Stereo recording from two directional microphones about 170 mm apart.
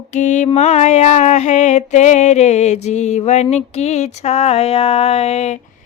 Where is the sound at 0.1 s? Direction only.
45° left (ahead or behind).